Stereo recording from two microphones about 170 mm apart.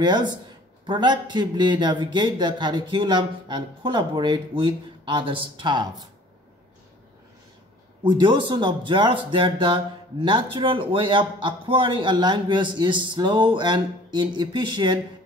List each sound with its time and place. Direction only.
0.0 s speech: 25° right (ahead or behind)
8.0 s speech: 30° right (ahead or behind)